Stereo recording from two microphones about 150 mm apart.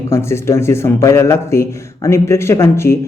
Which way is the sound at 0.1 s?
20° left (ahead or behind).